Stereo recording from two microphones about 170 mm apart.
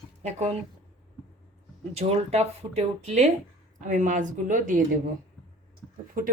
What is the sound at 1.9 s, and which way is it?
A woman's voice, 40° right (ahead or behind).